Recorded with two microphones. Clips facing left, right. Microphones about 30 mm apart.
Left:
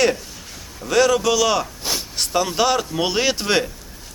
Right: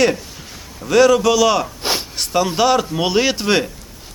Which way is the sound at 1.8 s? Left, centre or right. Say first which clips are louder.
Right 4 dB; right.